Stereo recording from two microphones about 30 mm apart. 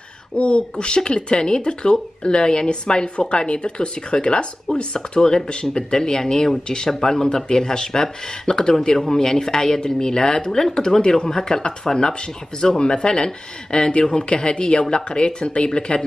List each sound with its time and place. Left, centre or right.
0.4 s speech: left